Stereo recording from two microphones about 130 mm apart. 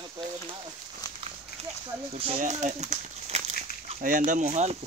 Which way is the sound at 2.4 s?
70° right (ahead or behind).